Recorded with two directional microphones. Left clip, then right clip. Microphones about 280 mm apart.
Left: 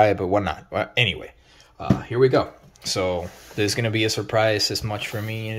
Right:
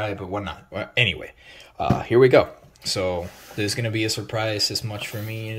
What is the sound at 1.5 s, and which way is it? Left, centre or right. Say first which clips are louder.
Speech: right 3 dB; centre.